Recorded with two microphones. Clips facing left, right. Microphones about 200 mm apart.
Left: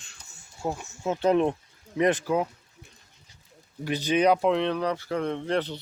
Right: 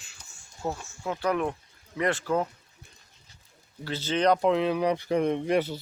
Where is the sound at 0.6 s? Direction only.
15° left (ahead or behind).